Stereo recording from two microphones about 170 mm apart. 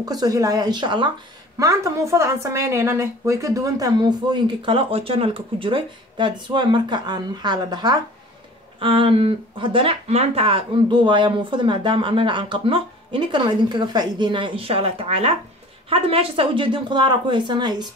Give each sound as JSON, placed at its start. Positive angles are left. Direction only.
{"t": 0.0, "sound": "a woman's voice", "side_deg": -20}